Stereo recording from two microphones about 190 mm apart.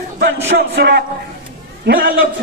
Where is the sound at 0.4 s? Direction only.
60° right (ahead or behind).